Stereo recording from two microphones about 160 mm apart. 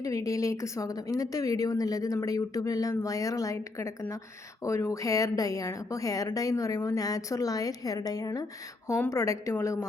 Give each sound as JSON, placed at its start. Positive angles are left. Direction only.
{"t": 0.0, "sound": "a woman's voice", "side_deg": 20}